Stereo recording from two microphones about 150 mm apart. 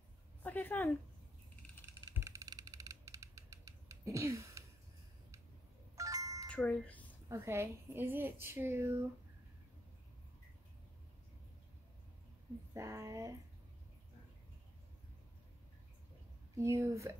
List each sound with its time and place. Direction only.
0.4 s speech: 10° left (ahead or behind)
2.1 s a sound: 20° right (ahead or behind)
5.9 s music: 20° right (ahead or behind)
6.5 s speech: 10° left (ahead or behind)
7.2 s a woman's voice: 15° right (ahead or behind)
12.7 s speech: 20° right (ahead or behind)
16.5 s speech: 20° right (ahead or behind)